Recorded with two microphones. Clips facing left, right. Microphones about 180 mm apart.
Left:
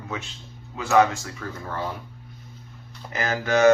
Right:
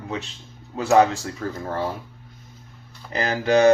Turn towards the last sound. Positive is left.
turn(degrees=-35)  # may be behind; listen again after turning